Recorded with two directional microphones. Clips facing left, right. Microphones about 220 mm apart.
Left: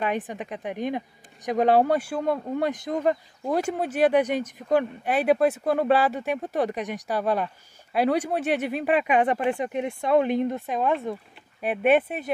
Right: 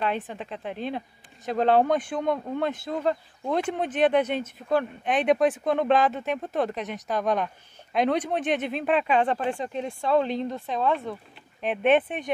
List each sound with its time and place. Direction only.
0.0 s speech: 15° left (ahead or behind)